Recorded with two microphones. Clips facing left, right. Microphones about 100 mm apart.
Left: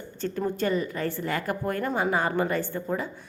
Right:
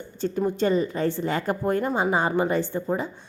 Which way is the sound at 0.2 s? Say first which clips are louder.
Right 4 dB; 15° right (ahead or behind).